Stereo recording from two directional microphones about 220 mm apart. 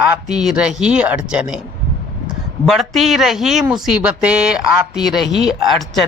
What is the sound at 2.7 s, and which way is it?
Speech, centre (ahead or behind).